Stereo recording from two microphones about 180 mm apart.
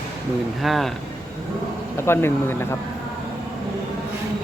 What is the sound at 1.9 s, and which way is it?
Speech, 15° left (ahead or behind).